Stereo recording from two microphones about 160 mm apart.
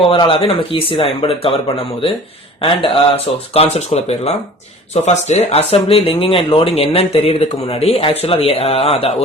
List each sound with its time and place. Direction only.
0.0 s speech: 35° left (ahead or behind)
2.6 s speech: 35° left (ahead or behind)